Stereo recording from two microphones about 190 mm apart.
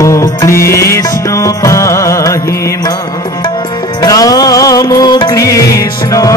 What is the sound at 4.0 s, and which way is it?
Music, 20° left (ahead or behind).